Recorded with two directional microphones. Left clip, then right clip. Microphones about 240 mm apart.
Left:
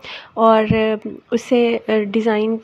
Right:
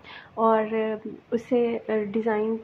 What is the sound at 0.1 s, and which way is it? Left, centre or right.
Speech, left.